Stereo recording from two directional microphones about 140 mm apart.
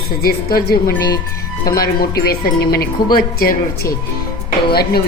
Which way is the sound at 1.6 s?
90° left.